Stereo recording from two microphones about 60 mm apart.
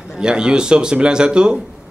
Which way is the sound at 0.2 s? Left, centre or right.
Centre.